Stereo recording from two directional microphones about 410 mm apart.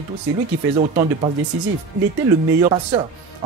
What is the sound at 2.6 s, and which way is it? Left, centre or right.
Speech, centre.